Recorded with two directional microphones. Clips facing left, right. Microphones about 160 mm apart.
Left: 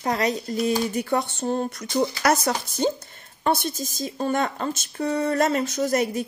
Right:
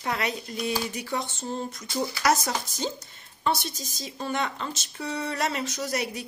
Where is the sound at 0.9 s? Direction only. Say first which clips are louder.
Left 7 dB; 60° left (ahead or behind).